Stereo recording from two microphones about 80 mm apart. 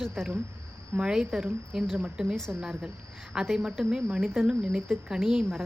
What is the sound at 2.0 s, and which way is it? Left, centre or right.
Speech, centre.